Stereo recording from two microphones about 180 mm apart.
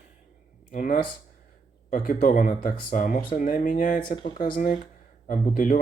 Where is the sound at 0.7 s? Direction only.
45° left (ahead or behind).